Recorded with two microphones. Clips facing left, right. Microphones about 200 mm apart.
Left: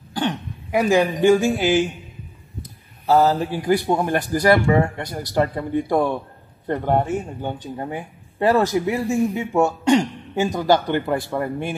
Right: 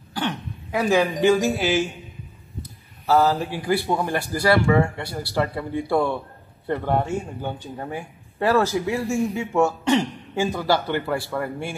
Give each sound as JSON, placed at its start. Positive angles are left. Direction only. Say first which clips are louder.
{"t": 0.1, "sound": "a woman's voice", "louder": "left 3 dB", "side_deg": 15}
{"t": 3.1, "sound": "a man's voice", "louder": "left 2 dB", "side_deg": 20}